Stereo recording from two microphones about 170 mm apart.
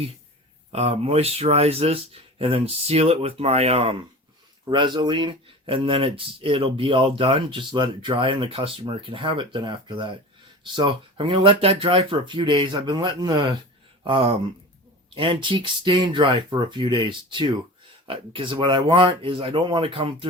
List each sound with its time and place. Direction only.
0.7 s speech: 35° right (ahead or behind)